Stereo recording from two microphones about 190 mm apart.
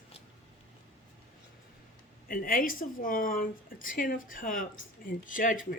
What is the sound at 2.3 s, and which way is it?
A woman's voice, 50° left (ahead or behind).